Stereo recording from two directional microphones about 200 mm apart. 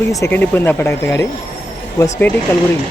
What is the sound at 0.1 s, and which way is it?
Speech, 10° left (ahead or behind).